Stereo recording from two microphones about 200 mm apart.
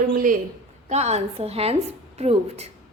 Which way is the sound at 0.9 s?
35° right (ahead or behind).